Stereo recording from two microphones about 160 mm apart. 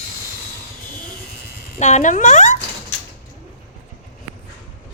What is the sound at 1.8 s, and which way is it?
Speech, 45° left (ahead or behind).